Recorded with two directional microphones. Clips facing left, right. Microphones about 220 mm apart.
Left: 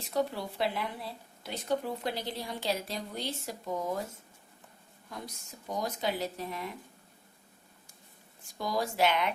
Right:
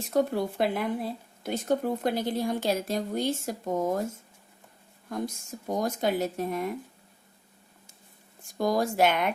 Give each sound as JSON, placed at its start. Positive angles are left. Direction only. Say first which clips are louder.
{"t": 0.1, "sound": "speech", "louder": "right 6 dB", "side_deg": -50}
{"t": 5.0, "sound": "speech", "louder": "right 11 dB", "side_deg": -50}
{"t": 8.5, "sound": "speech", "louder": "right 6 dB", "side_deg": -50}